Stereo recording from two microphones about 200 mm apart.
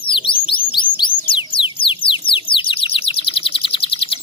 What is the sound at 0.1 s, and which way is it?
Bird, 25° left (ahead or behind).